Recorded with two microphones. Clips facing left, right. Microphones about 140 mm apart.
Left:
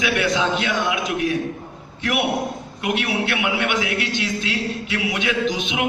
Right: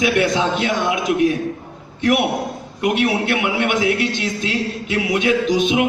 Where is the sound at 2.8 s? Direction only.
40° right (ahead or behind).